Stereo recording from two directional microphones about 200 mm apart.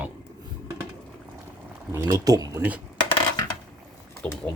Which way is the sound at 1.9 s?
15° right (ahead or behind).